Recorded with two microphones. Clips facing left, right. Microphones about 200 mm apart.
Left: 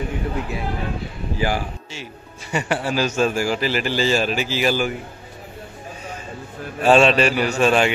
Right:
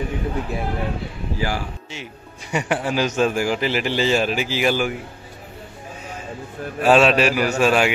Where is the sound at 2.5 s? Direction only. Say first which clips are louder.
Even; 15° right (ahead or behind).